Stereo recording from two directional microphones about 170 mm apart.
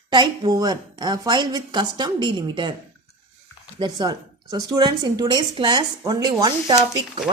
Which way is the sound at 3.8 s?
25° right (ahead or behind).